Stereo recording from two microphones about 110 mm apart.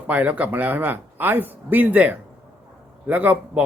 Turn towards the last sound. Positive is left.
turn(degrees=-15)  # may be behind; listen again after turning